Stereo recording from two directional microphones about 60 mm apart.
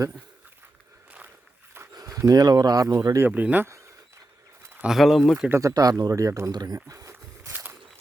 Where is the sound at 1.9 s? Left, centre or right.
Right.